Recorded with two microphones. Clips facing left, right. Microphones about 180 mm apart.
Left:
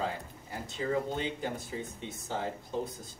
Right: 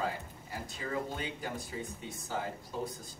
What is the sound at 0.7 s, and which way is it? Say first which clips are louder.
Speech: left 6 dB; 20° left (ahead or behind).